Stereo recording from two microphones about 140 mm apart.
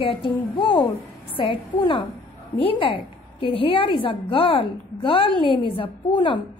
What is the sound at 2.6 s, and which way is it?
A woman's voice, 40° left (ahead or behind).